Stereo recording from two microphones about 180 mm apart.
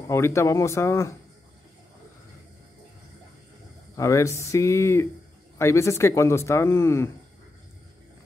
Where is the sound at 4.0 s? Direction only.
15° left (ahead or behind).